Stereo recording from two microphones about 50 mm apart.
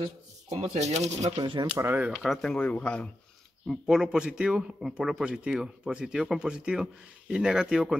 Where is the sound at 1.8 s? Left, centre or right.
Right.